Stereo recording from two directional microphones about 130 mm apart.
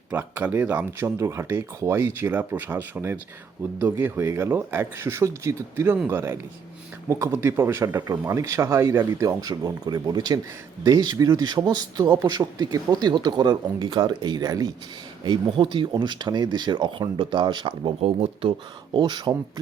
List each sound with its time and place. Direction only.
0.1 s a man's voice: 15° right (ahead or behind); by 18.5 s 45° right (ahead or behind)
18.9 s a man's voice: 35° right (ahead or behind)